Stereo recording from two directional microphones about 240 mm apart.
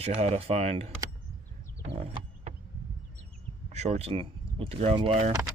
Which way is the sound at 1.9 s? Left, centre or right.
Right.